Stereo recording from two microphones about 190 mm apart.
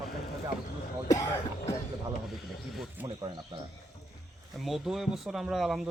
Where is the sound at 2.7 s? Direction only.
Centre (ahead or behind).